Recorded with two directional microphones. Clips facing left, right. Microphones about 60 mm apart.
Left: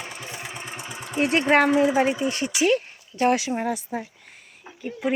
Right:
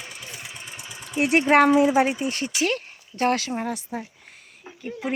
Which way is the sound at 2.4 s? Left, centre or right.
Centre.